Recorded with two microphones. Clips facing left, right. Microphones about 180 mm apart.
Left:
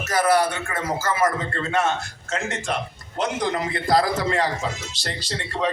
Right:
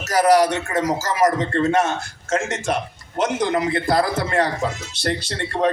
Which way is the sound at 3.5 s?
55° right (ahead or behind).